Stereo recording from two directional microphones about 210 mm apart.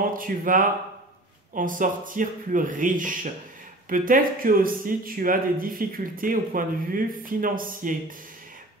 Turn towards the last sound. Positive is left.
turn(degrees=-40)  # may be behind; listen again after turning